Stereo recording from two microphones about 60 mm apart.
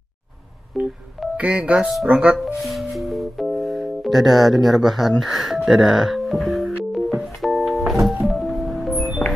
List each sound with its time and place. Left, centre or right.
0.7 s telephone dialing: centre
1.3 s speech: right
2.3 s music: centre